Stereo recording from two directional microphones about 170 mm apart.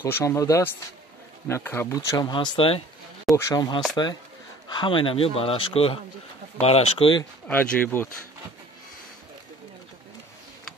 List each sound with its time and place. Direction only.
0.0 s speech: 15° left (ahead or behind); by 2.8 s 30° left (ahead or behind)
3.3 s speech: 20° left (ahead or behind)
7.4 s speech: 5° left (ahead or behind)